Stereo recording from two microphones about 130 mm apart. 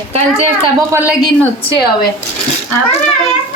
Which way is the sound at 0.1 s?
50° right (ahead or behind).